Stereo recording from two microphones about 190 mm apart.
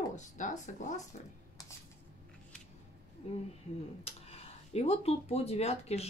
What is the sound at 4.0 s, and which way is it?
Speech, 30° left (ahead or behind).